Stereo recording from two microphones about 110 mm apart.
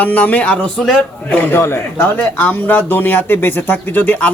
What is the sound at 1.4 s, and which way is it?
Speech, 20° left (ahead or behind).